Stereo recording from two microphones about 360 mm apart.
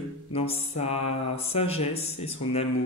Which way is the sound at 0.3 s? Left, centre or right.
Centre.